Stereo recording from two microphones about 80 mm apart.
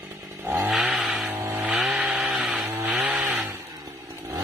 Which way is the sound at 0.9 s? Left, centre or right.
Centre.